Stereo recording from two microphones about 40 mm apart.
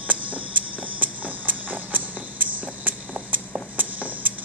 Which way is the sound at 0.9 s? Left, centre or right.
Right.